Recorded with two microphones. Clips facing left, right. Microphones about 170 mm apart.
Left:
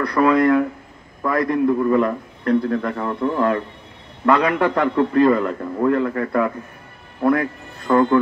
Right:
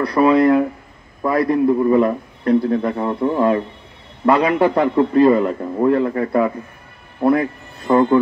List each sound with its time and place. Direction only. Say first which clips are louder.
0.0 s a man's voice: right 2 dB; 25° right (ahead or behind)